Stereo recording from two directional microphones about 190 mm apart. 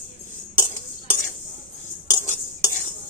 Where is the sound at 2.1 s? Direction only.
20° left (ahead or behind).